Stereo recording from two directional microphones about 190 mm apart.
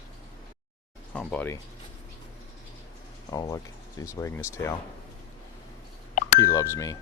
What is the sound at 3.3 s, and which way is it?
Speech, 20° left (ahead or behind).